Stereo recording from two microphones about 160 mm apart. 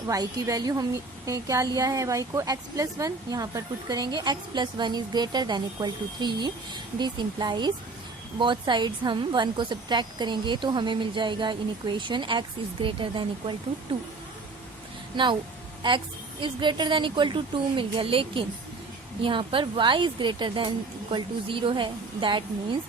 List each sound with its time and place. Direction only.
0.1 s a woman's voice: 25° right (ahead or behind)
15.1 s speech: 30° right (ahead or behind)
16.4 s speech: 30° right (ahead or behind)